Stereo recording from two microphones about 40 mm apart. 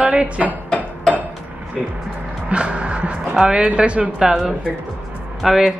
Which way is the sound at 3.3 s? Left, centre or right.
Centre.